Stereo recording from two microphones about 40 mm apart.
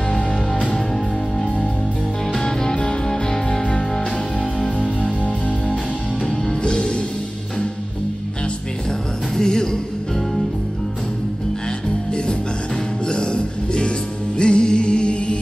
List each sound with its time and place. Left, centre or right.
2.3 s music: centre
9.3 s music: centre
13.0 s music: left